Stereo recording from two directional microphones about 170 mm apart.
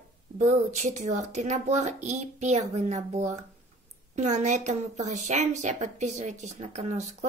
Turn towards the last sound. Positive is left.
turn(degrees=-40)  # may be behind; listen again after turning